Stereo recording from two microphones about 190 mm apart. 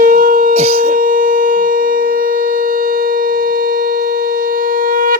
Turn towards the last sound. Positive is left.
turn(degrees=-45)  # may be behind; listen again after turning